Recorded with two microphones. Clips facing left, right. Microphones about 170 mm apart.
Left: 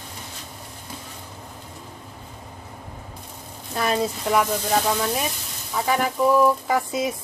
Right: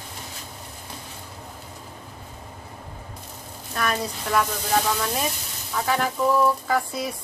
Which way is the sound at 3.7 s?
25° left (ahead or behind).